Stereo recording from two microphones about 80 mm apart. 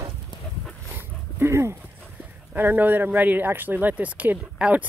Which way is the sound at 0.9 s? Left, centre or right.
Right.